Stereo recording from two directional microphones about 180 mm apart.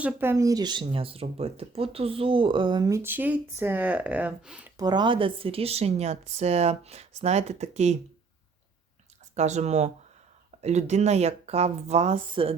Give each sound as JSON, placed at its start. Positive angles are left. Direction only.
{"t": 0.0, "sound": "speech", "side_deg": -10}
{"t": 4.8, "sound": "speech", "side_deg": -25}
{"t": 9.3, "sound": "speech", "side_deg": -40}